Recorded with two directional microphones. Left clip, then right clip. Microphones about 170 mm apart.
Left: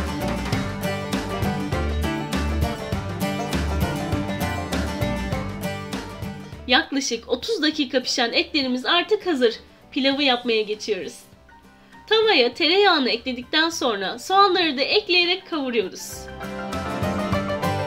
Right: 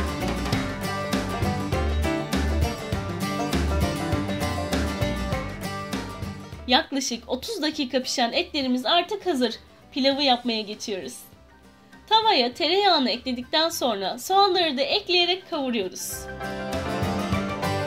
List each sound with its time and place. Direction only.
0.2 s music: centre (ahead or behind)
6.7 s a woman's voice: 45° right (ahead or behind)
12.1 s a woman's voice: 45° right (ahead or behind)
16.4 s music: centre (ahead or behind)